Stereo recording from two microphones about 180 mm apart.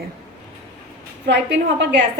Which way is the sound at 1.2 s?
70° right (ahead or behind).